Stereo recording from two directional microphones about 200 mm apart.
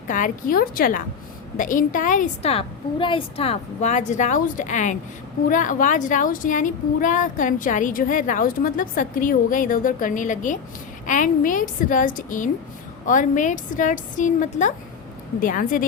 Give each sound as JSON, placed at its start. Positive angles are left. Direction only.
{"t": 0.1, "sound": "a woman's voice", "side_deg": 45}